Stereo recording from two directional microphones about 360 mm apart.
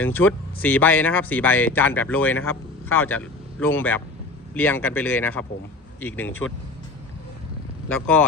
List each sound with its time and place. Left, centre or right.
0.0 s a man's voice: centre
7.9 s speech: centre